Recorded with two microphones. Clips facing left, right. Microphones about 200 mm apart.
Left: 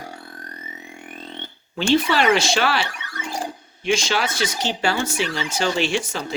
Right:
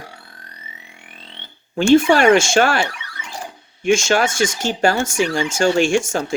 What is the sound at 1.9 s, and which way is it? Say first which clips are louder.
Speech: right 6 dB; 50° right (ahead or behind).